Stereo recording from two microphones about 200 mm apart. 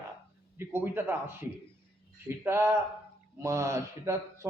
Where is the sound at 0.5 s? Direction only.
10° right (ahead or behind).